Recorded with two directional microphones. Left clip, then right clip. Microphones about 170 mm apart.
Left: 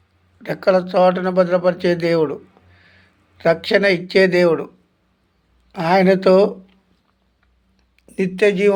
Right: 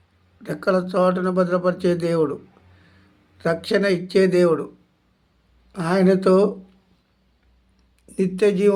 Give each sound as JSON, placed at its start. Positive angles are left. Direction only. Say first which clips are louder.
{"t": 0.4, "sound": "speech", "louder": "left 5 dB", "side_deg": -20}
{"t": 5.7, "sound": "speech", "louder": "left 5 dB", "side_deg": -15}
{"t": 8.0, "sound": "speech", "louder": "left 3 dB", "side_deg": -20}